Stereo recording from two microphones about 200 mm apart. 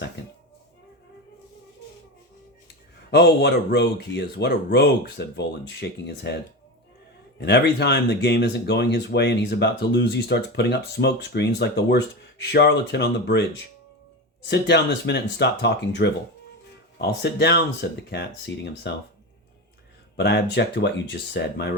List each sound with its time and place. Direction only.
3.1 s speech: 55° left (ahead or behind)
14.4 s speech: 60° left (ahead or behind)
20.1 s speech: 55° left (ahead or behind)